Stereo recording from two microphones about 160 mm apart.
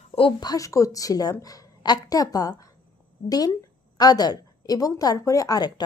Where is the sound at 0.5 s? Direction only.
20° left (ahead or behind).